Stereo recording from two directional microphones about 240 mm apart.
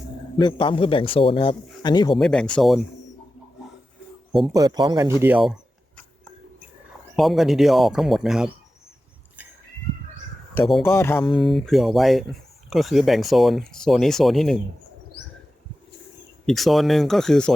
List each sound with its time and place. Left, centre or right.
0.3 s speech: centre
2.1 s speech: centre
4.3 s speech: centre
4.5 s speech: centre
5.2 s speech: centre
7.2 s speech: centre
10.5 s speech: centre
11.2 s speech: left
11.4 s speech: centre
16.5 s speech: centre